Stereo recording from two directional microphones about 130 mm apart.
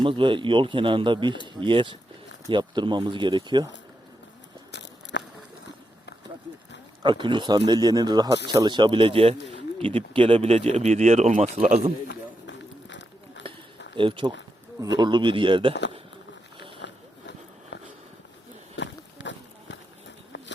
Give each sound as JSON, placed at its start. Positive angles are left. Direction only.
{"t": 0.0, "sound": "speech", "side_deg": -40}
{"t": 7.0, "sound": "speech", "side_deg": -35}
{"t": 13.5, "sound": "a sound", "side_deg": -45}
{"t": 13.9, "sound": "speech", "side_deg": -40}